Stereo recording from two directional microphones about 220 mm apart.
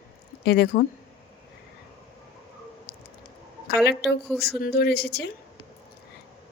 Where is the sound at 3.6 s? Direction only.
50° left (ahead or behind).